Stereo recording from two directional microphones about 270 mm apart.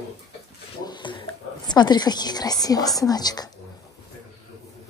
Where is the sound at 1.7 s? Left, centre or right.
Centre.